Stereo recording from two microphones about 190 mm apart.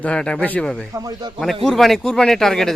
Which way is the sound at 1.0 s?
20° right (ahead or behind).